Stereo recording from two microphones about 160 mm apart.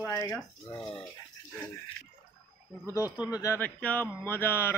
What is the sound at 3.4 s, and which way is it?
Speech, 15° left (ahead or behind).